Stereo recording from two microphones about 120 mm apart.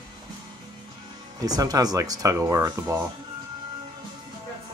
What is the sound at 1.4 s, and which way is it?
Speech, 30° right (ahead or behind).